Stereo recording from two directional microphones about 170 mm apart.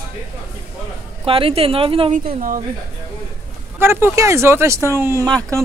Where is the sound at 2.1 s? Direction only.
50° right (ahead or behind).